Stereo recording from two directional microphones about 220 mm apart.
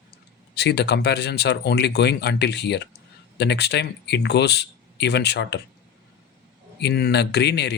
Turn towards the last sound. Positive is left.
turn(degrees=50)  # may be behind; listen again after turning